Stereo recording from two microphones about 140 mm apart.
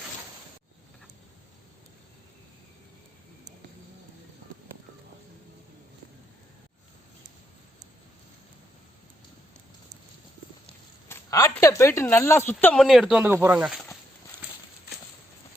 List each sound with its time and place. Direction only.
11.1 s speech: 25° left (ahead or behind)
12.7 s speech: centre (ahead or behind)